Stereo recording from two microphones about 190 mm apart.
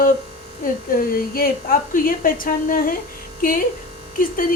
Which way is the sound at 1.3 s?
50° left (ahead or behind).